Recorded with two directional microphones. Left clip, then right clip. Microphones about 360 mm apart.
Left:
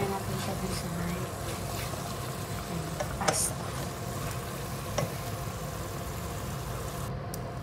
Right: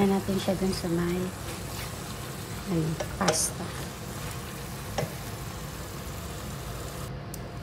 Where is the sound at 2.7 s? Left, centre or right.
Centre.